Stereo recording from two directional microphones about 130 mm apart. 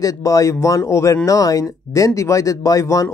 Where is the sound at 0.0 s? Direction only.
25° left (ahead or behind).